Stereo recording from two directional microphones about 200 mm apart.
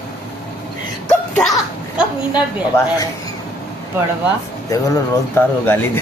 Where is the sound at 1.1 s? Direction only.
Centre (ahead or behind).